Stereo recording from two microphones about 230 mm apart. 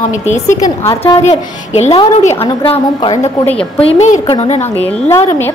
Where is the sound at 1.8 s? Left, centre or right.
Left.